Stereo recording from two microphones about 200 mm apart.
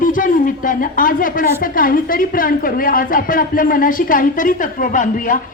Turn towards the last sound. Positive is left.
turn(degrees=40)  # may be behind; listen again after turning